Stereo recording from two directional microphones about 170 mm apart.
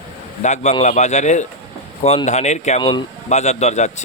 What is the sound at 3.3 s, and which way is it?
Speech, 40° left (ahead or behind).